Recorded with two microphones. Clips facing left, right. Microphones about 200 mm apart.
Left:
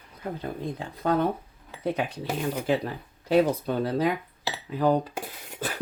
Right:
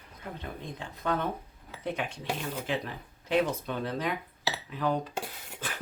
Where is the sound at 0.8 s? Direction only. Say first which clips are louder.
Left 6 dB; 35° left (ahead or behind).